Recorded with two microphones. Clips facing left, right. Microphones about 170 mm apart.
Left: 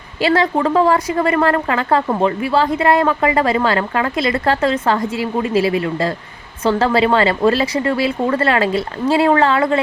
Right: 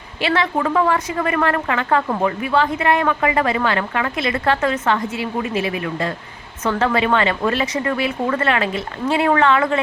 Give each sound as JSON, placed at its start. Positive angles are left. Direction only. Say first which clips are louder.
{"t": 0.2, "sound": "a woman's voice", "louder": "left 4 dB", "side_deg": 40}